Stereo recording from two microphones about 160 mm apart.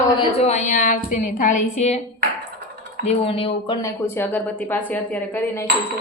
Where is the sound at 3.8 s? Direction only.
15° left (ahead or behind).